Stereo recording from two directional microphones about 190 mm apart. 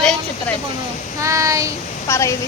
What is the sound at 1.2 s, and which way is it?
Child singing, 15° right (ahead or behind).